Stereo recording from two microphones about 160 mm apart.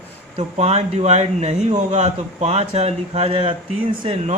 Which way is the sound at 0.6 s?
40° right (ahead or behind).